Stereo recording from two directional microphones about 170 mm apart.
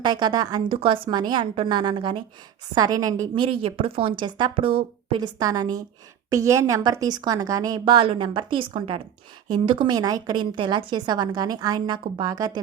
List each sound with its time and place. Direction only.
0.0 s a woman's voice: 25° right (ahead or behind)